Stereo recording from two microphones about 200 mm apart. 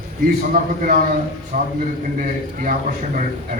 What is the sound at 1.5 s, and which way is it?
Speech, 40° right (ahead or behind).